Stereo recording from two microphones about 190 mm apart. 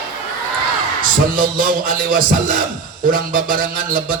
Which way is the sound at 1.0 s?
45° right (ahead or behind).